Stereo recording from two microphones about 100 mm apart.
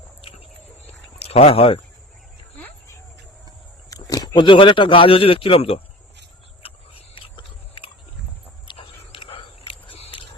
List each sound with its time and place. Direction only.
1.2 s speech: 80° left
3.8 s a sound: 40° left (ahead or behind)
4.4 s speech: 55° left (ahead or behind); by 5.8 s 75° left (ahead or behind)
6.6 s biting: 65° left (ahead or behind)